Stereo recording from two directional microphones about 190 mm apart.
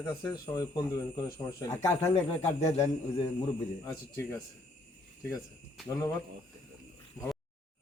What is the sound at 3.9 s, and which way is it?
Speech, 15° left (ahead or behind).